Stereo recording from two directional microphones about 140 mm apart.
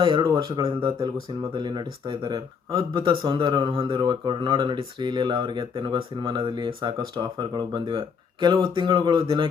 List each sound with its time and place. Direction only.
0.0 s speech: 30° right (ahead or behind)